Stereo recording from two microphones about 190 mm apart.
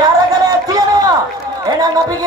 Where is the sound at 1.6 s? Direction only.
20° right (ahead or behind).